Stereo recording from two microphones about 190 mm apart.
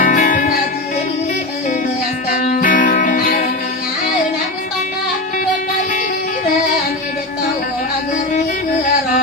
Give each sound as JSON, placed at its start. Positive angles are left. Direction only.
{"t": 0.0, "sound": "music", "side_deg": 45}
{"t": 2.3, "sound": "music", "side_deg": 45}